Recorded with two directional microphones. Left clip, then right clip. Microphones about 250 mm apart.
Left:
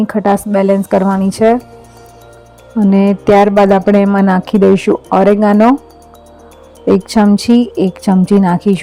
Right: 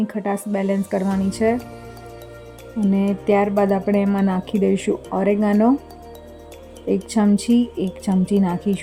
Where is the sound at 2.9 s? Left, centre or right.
Left.